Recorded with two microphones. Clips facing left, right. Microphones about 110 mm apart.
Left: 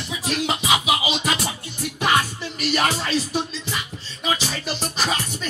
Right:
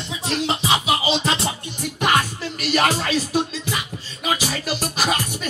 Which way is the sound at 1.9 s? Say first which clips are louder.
Right 1 dB; 5° right (ahead or behind).